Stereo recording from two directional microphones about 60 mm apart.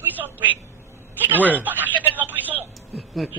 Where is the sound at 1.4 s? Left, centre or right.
Left.